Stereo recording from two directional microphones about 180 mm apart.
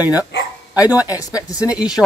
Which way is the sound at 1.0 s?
20° left (ahead or behind).